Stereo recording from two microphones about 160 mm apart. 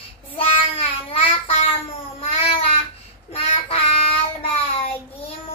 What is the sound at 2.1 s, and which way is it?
Cat, 35° left (ahead or behind).